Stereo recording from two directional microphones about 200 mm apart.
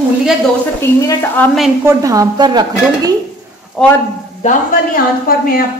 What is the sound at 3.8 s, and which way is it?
Speech, centre (ahead or behind).